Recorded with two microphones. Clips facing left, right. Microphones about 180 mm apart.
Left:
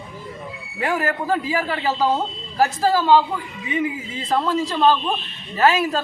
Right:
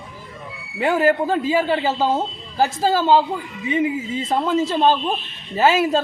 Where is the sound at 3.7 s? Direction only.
25° right (ahead or behind).